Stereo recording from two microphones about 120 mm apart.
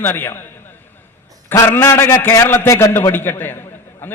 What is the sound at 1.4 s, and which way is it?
A man's voice, 20° left (ahead or behind).